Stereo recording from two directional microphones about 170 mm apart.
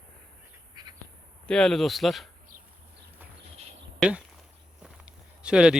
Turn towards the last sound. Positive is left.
turn(degrees=-5)  # may be behind; listen again after turning